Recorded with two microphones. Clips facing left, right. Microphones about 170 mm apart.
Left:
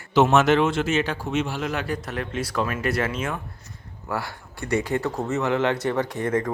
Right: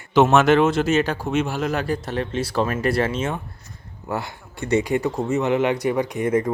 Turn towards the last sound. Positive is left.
turn(degrees=-20)  # may be behind; listen again after turning